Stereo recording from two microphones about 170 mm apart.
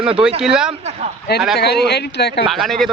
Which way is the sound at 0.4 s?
5° right (ahead or behind).